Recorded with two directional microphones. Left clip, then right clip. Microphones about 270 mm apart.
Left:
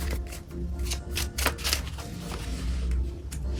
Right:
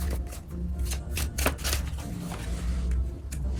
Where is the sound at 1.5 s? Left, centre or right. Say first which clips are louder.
Left 2 dB; centre.